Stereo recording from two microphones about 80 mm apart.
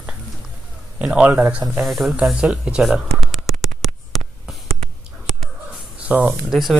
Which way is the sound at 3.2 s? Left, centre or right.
Centre.